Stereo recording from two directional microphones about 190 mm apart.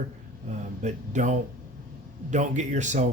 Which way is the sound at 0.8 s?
40° right (ahead or behind).